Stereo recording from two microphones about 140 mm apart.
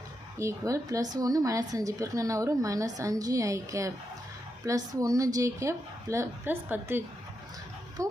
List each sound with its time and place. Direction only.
0.3 s speech: 20° right (ahead or behind)